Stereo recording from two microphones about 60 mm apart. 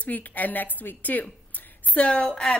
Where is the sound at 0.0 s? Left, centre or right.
Left.